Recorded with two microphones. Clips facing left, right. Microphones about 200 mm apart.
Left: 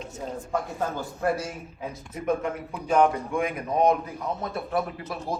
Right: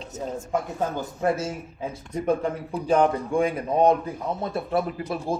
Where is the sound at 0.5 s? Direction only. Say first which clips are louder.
Right 2 dB; 20° right (ahead or behind).